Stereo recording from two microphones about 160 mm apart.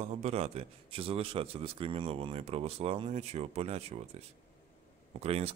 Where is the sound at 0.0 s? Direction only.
40° right (ahead or behind).